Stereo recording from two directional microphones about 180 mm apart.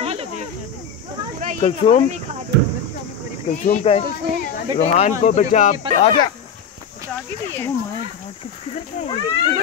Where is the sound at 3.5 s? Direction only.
45° left (ahead or behind).